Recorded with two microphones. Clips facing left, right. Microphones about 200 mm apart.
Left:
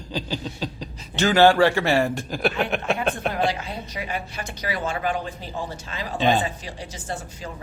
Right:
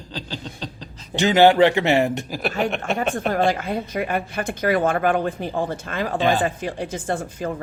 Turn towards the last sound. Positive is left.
turn(degrees=-55)  # may be behind; listen again after turning